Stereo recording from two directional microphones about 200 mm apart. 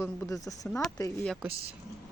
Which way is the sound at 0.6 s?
5° left (ahead or behind).